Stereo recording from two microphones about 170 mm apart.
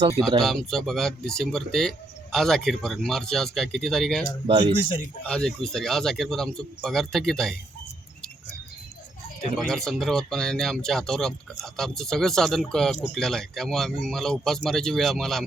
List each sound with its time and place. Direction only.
0.3 s speech: centre (ahead or behind)
4.4 s speech: 25° right (ahead or behind)
5.2 s speech: 5° left (ahead or behind)
9.6 s speech: centre (ahead or behind)